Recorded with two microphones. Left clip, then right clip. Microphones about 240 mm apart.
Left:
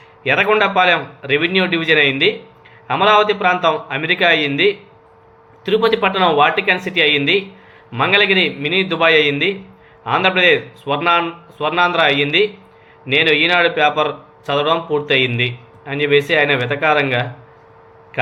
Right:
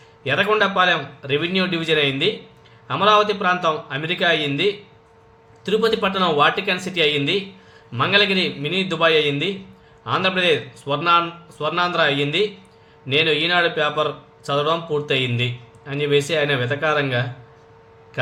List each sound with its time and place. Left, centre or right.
0.3 s speech: centre